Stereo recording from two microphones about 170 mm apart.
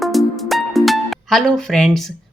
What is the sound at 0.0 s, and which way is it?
Speech, centre (ahead or behind).